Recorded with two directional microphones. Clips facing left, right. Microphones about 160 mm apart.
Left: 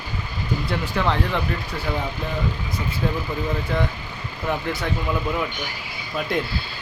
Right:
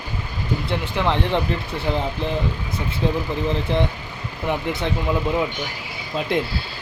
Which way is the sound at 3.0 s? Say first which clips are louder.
Right 4 dB; 25° right (ahead or behind).